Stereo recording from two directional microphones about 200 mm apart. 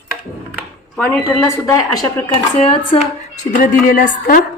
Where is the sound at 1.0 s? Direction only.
15° left (ahead or behind).